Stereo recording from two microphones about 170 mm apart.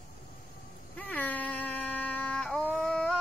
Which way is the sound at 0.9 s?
10° left (ahead or behind).